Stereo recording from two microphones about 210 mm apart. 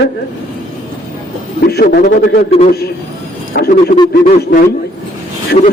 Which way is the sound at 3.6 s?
45° left (ahead or behind).